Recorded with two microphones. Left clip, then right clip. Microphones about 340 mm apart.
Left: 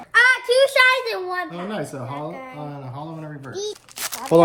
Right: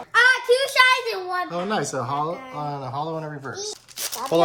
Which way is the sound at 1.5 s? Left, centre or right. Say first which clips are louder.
Right 4 dB; centre.